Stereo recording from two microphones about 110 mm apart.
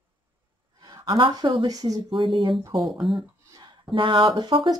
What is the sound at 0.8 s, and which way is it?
Speech, 45° right (ahead or behind).